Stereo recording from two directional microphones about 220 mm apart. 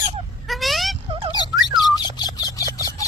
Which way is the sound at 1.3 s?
20° left (ahead or behind).